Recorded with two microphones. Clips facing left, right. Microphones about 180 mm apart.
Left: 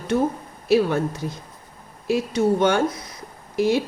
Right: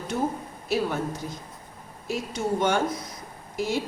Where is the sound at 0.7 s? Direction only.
75° left (ahead or behind).